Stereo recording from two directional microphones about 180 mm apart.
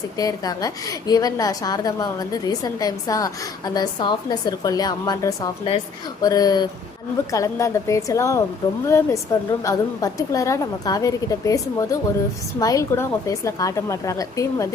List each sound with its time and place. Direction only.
0.2 s a woman's voice: 20° left (ahead or behind)